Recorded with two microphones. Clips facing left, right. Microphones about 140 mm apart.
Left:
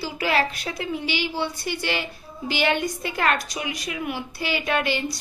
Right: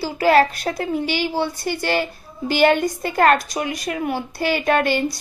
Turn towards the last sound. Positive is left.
turn(degrees=-45)  # may be behind; listen again after turning